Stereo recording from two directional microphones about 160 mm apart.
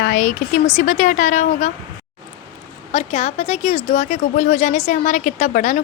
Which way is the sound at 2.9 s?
40° left (ahead or behind).